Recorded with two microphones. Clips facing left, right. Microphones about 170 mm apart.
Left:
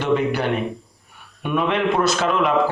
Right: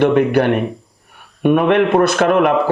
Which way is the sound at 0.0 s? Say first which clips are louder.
Right 7 dB; 60° right (ahead or behind).